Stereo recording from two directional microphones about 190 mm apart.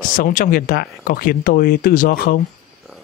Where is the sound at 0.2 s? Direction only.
45° left (ahead or behind).